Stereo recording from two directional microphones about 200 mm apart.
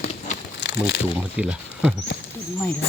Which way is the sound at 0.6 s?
60° left (ahead or behind).